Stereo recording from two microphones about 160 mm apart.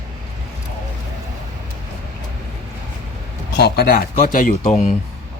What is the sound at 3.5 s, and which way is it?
Speech, 85° left.